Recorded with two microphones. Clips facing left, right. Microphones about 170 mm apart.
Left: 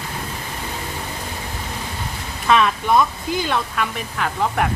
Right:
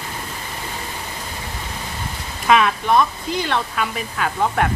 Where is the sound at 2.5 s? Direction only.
5° right (ahead or behind).